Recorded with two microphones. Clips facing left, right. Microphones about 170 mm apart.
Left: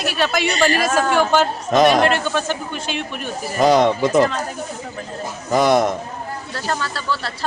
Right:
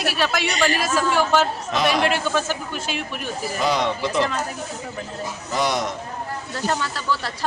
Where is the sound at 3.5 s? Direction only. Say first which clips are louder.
Left 9 dB; 45° left (ahead or behind).